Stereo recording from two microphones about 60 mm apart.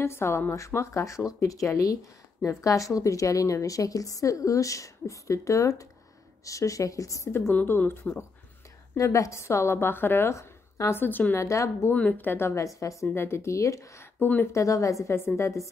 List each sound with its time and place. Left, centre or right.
0.0 s a woman's voice: left
7.5 s a woman's voice: left
8.9 s a woman's voice: left
10.3 s a sound: left
11.0 s a woman's voice: left
11.3 s a woman's voice: left
11.9 s a woman's voice: left
12.6 s a woman's voice: left
13.1 s a woman's voice: left
14.2 s a woman's voice: left
14.5 s a woman's voice: left
15.1 s a woman's voice: left